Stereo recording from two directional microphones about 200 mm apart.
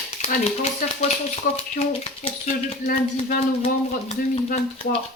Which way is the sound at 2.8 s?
40° left (ahead or behind).